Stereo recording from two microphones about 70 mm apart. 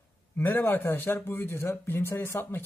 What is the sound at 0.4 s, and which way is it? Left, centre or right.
Speech, left.